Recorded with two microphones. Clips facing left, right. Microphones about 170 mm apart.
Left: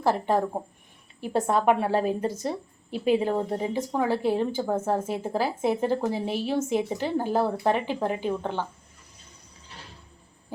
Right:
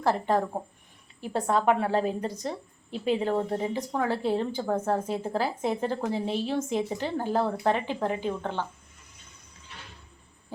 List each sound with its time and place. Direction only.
0.0 s a woman's voice: 10° left (ahead or behind)